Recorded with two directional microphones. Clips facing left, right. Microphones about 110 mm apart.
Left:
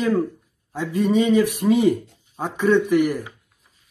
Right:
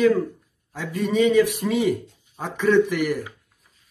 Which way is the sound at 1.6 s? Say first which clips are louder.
Left 4 dB; 15° left (ahead or behind).